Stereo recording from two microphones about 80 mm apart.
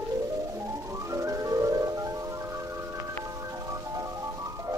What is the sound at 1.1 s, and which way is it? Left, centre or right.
Music, right.